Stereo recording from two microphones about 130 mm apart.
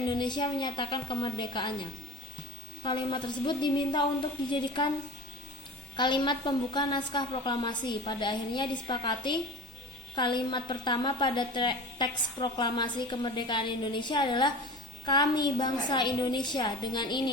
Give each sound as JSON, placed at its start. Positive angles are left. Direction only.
{"t": 0.1, "sound": "a woman's voice", "side_deg": 35}
{"t": 2.8, "sound": "a woman's voice", "side_deg": 40}
{"t": 6.0, "sound": "a woman's voice", "side_deg": 35}